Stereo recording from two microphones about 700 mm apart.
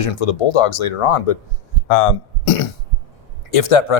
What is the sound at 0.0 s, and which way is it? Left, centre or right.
Speech, left.